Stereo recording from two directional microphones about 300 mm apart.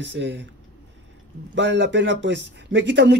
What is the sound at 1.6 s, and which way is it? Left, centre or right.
Speech, right.